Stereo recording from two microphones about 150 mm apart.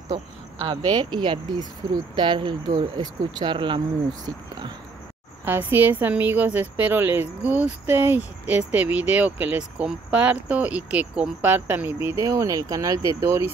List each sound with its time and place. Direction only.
0.7 s speech: 30° right (ahead or behind)
5.4 s a woman's voice: 15° right (ahead or behind)